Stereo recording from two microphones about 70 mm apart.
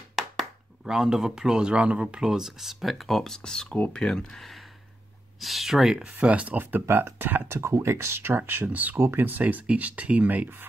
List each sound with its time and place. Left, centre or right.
0.1 s speech: centre
6.1 s speech: centre
7.5 s speech: right